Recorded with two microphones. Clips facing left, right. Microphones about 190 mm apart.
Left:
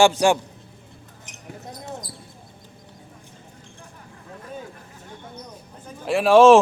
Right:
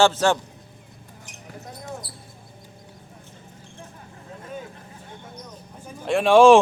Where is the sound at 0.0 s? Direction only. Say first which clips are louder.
Left 2 dB; 15° left (ahead or behind).